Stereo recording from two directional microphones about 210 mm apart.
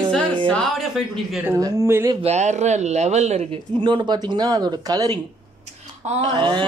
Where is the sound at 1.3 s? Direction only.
10° right (ahead or behind).